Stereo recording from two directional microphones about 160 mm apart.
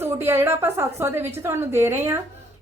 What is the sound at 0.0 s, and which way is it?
A woman's voice, 15° right (ahead or behind).